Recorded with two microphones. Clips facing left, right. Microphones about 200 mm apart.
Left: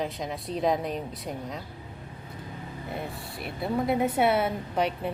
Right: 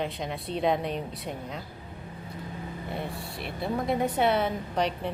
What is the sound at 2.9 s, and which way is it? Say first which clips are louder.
A woman's voice: even; centre (ahead or behind).